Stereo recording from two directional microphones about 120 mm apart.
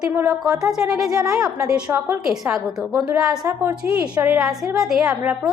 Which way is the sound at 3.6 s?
15° right (ahead or behind).